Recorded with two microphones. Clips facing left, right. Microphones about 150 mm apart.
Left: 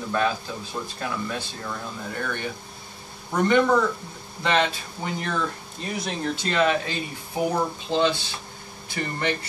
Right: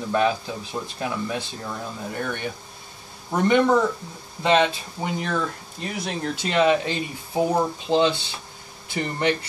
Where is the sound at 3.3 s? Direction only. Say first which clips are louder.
Right 1 dB; 20° right (ahead or behind).